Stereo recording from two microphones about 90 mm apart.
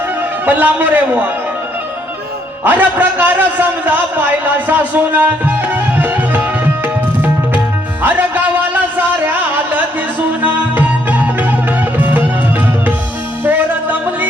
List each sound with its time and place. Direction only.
0.4 s a man's voice: 20° right (ahead or behind)
2.6 s a man's voice: 20° right (ahead or behind)
8.7 s a sound: 20° right (ahead or behind)
10.4 s music: 15° right (ahead or behind)
13.4 s music: 20° right (ahead or behind)